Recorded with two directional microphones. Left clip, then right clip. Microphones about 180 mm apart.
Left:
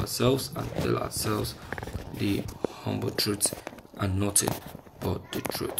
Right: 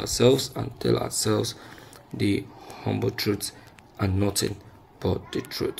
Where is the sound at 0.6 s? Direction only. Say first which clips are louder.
Right 3 dB; 30° right (ahead or behind).